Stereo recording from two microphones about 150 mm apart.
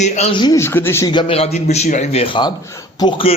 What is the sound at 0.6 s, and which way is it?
Speech, 15° left (ahead or behind).